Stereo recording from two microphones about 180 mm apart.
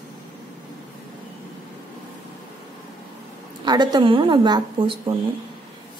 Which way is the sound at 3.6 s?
25° right (ahead or behind).